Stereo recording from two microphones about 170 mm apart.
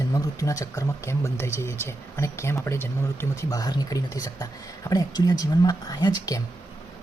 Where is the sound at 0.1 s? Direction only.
20° left (ahead or behind).